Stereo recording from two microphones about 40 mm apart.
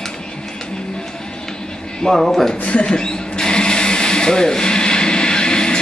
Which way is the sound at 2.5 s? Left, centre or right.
Left.